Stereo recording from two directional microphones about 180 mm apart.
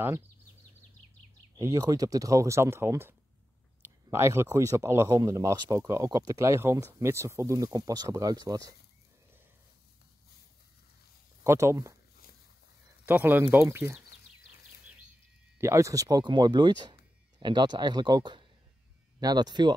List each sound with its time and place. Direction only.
1.6 s speech: 20° right (ahead or behind)
11.4 s speech: 15° right (ahead or behind)
13.0 s speech: 10° right (ahead or behind)
15.5 s speech: 15° right (ahead or behind)